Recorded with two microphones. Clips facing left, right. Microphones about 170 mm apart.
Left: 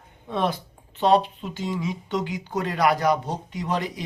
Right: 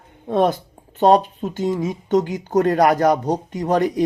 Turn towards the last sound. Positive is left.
turn(degrees=-45)  # may be behind; listen again after turning